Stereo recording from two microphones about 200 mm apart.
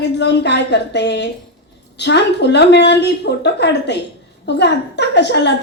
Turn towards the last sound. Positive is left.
turn(degrees=55)  # may be behind; listen again after turning